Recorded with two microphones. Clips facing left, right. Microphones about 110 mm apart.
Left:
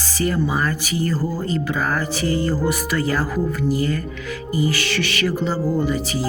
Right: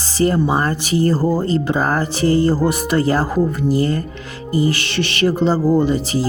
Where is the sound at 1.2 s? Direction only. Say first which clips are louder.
Right 7 dB; 50° right (ahead or behind).